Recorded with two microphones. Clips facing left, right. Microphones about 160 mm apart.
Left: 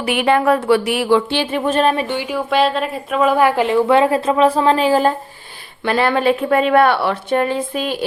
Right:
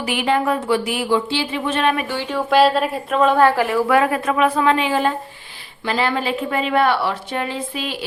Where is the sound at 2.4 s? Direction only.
Centre (ahead or behind).